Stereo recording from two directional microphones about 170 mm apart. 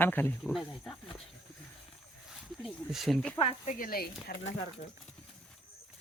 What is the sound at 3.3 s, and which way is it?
Speech, 35° left (ahead or behind).